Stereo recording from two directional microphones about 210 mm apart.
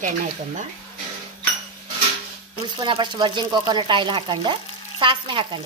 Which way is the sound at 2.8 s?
20° right (ahead or behind).